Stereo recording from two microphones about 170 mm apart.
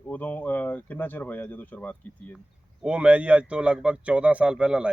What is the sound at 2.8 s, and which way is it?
Speech, 5° right (ahead or behind).